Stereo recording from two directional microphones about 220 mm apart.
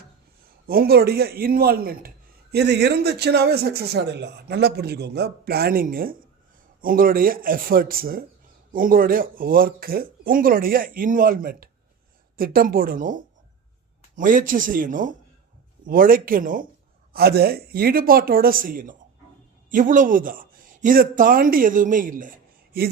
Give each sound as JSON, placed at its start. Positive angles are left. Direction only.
{"t": 0.7, "sound": "a man's voice", "side_deg": -45}